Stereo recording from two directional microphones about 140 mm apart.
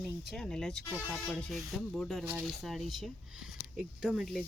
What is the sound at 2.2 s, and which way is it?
Speech, 15° right (ahead or behind).